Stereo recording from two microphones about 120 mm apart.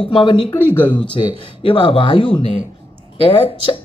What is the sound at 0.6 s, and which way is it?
Speech, 15° left (ahead or behind).